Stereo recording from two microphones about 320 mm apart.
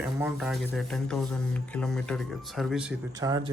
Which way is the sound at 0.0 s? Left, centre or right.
Centre.